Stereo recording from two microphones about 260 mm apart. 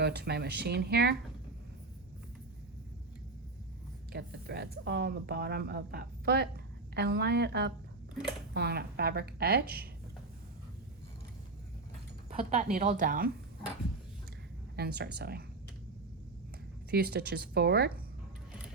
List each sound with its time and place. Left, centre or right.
0.0 s speech: right
4.1 s speech: right
12.3 s speech: right
14.8 s speech: right
16.9 s speech: right